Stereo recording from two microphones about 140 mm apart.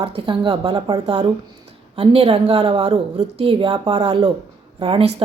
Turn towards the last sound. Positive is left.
turn(degrees=-40)  # may be behind; listen again after turning